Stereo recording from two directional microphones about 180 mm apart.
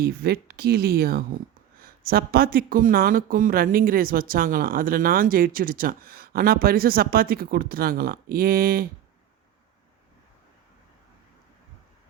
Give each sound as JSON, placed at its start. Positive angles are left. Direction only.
{"t": 0.0, "sound": "speech", "side_deg": -60}